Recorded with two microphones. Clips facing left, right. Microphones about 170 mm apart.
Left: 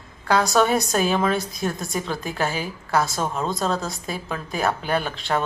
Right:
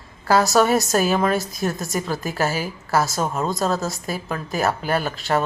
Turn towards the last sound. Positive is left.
turn(degrees=-5)  # may be behind; listen again after turning